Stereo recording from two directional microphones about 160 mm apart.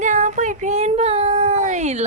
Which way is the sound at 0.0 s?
50° right (ahead or behind).